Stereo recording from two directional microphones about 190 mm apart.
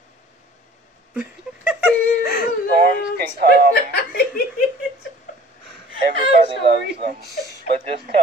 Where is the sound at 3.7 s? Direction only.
60° left (ahead or behind).